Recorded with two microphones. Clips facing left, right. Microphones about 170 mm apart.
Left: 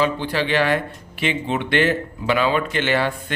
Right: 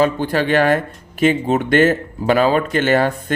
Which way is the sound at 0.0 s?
45° right (ahead or behind).